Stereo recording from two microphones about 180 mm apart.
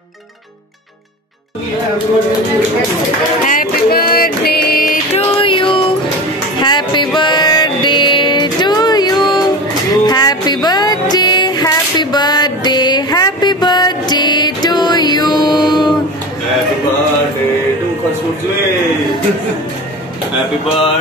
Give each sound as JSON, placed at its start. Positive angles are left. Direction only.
{"t": 3.4, "sound": "music", "side_deg": 50}
{"t": 5.1, "sound": "music", "side_deg": 30}